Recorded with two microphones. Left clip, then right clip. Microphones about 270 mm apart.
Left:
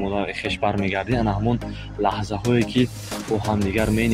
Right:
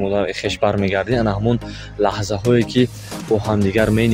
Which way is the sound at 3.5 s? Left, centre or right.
Right.